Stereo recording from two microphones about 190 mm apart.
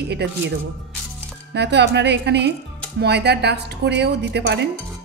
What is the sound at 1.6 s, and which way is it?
A woman's voice, 65° right (ahead or behind).